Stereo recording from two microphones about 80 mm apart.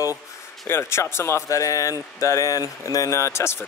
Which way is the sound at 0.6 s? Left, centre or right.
Left.